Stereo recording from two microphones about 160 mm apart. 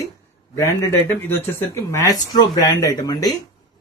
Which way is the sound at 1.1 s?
15° left (ahead or behind).